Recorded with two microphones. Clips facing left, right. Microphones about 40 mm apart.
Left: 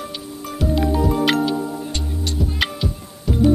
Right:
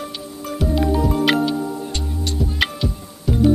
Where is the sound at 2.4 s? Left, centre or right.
Centre.